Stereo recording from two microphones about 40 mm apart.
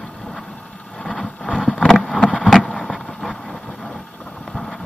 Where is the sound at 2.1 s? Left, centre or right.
Left.